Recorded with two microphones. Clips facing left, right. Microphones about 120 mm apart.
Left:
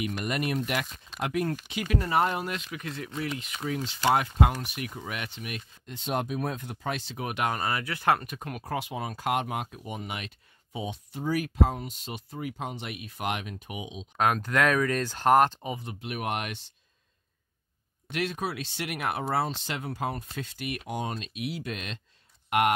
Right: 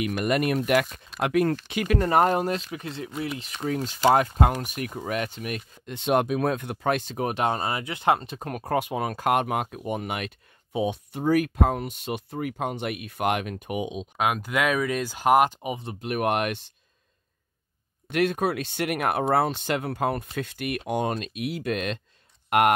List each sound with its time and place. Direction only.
0.0 s speech: 60° right (ahead or behind)
1.7 s speech: 55° right (ahead or behind); by 3.1 s 30° right (ahead or behind)
3.6 s speech: 40° right (ahead or behind)
5.9 s speech: 70° right (ahead or behind); by 8.4 s 20° right (ahead or behind)
8.4 s speech: 45° right (ahead or behind)
14.1 s speech: 5° right (ahead or behind)
16.0 s speech: 55° right (ahead or behind)
18.1 s speech: 55° right (ahead or behind)